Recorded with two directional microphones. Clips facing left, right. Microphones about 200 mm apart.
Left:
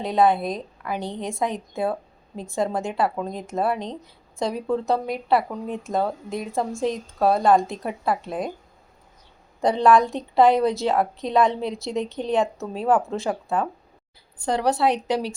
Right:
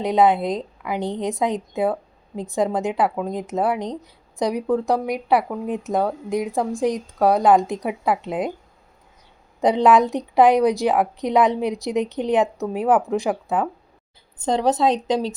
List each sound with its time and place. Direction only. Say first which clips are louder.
0.0 s a woman's voice: right 2 dB; 20° right (ahead or behind)
9.6 s a woman's voice: right 2 dB; 20° right (ahead or behind)